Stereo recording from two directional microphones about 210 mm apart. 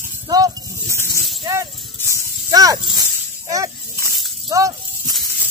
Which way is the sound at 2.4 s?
15° right (ahead or behind).